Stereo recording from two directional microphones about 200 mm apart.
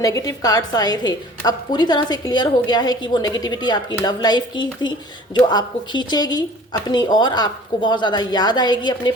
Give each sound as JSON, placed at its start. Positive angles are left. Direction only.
{"t": 0.0, "sound": "a woman's voice", "side_deg": 15}